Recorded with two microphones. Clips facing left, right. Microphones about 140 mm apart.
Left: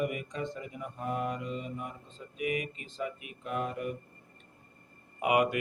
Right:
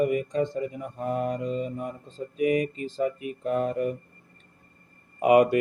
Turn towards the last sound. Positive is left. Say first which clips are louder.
# right 8 dB
turn(degrees=-35)  # may be behind; listen again after turning